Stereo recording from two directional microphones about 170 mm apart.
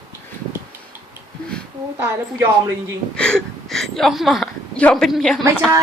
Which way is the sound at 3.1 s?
5° left (ahead or behind).